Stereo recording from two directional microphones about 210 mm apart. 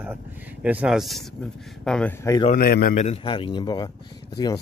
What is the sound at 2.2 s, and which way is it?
Speech, 15° left (ahead or behind).